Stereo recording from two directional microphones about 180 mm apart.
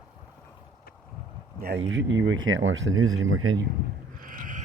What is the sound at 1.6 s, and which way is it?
Speech, 80° right.